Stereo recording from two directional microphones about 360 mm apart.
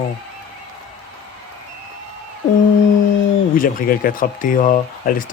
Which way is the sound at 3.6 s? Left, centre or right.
Left.